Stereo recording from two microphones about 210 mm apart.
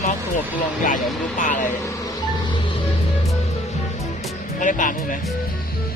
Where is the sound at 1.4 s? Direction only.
40° left (ahead or behind).